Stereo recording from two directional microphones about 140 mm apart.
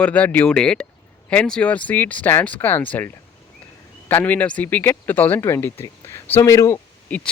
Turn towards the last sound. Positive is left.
turn(degrees=10)  # may be behind; listen again after turning